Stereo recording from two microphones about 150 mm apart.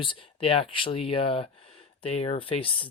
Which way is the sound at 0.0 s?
35° left (ahead or behind).